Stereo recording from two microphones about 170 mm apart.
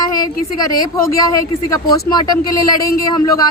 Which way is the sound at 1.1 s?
20° left (ahead or behind).